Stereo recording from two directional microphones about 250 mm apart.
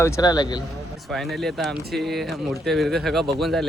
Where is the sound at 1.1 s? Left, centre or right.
Centre.